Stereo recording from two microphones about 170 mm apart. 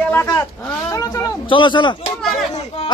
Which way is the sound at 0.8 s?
20° left (ahead or behind).